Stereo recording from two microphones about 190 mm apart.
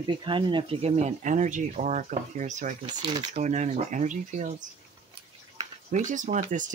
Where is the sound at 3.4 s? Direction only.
40° right (ahead or behind).